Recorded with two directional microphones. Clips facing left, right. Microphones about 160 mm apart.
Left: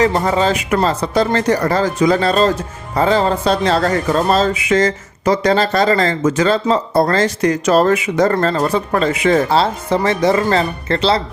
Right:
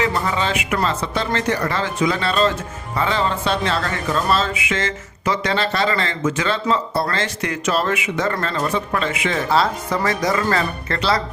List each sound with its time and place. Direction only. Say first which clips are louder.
0.0 s speech: left 6 dB; 40° left (ahead or behind)